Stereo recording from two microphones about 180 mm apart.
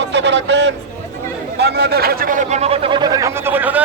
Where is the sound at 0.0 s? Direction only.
75° right (ahead or behind).